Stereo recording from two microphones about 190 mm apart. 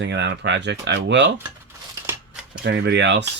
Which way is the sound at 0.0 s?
65° right (ahead or behind).